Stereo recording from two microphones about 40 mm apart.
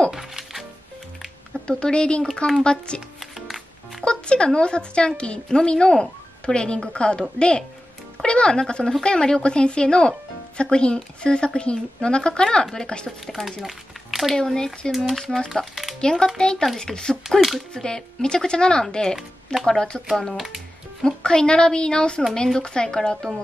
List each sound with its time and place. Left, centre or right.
0.1 s music: centre
1.7 s speech: left
4.0 s speech: left
13.3 s speech: centre
14.3 s speech: centre
15.7 s music: centre
16.0 s speech: left
20.3 s speech: centre
21.0 s speech: left